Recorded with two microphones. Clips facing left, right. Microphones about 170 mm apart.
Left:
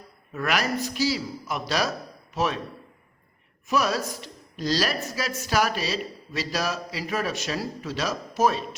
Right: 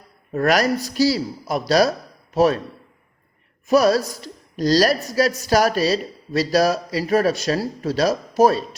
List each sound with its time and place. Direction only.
0.3 s a woman's voice: 40° right (ahead or behind)
3.7 s a woman's voice: 35° right (ahead or behind)